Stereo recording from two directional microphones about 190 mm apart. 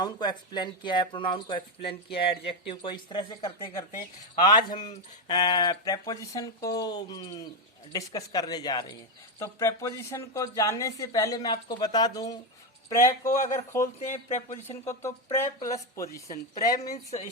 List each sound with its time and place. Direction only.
0.0 s speech: 20° left (ahead or behind)
14.1 s speech: 40° left (ahead or behind)
14.7 s speech: 15° left (ahead or behind)